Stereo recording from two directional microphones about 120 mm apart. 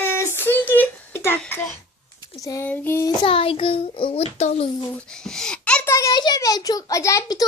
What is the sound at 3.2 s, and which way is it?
A child's voice, 50° left (ahead or behind).